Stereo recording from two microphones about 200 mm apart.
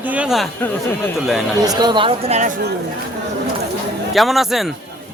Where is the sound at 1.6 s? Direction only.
20° right (ahead or behind).